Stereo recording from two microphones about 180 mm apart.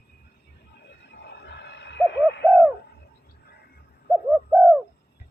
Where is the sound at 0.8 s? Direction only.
75° left (ahead or behind).